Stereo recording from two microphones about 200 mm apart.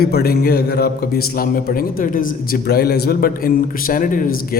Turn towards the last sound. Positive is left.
turn(degrees=45)  # may be behind; listen again after turning